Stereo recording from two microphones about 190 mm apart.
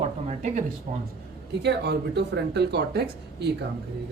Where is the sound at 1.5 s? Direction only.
65° right (ahead or behind).